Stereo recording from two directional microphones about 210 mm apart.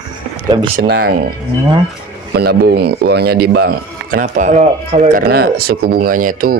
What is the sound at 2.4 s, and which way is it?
A man's voice, 50° right (ahead or behind).